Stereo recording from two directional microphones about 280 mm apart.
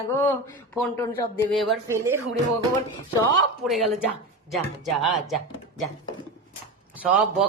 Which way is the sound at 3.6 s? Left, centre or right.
Centre.